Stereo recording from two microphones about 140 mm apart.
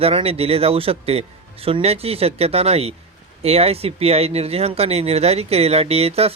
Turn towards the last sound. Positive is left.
turn(degrees=-45)  # may be behind; listen again after turning